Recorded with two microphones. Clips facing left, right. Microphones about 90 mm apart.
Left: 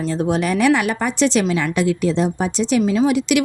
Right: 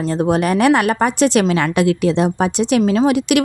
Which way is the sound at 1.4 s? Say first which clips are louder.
Right 3 dB; 70° right (ahead or behind).